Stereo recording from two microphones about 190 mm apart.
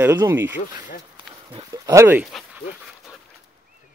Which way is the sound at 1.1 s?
25° right (ahead or behind).